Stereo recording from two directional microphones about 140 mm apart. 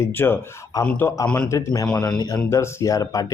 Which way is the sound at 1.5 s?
20° left (ahead or behind).